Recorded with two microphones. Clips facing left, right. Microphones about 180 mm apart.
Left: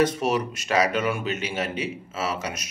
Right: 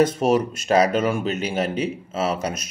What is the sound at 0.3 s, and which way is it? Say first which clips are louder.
A man's voice: right 6 dB; 40° right (ahead or behind).